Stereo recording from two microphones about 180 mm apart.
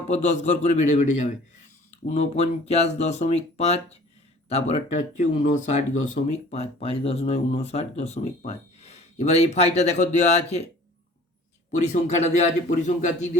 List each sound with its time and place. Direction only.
0.1 s speech: 40° left (ahead or behind)
11.7 s speech: 40° left (ahead or behind)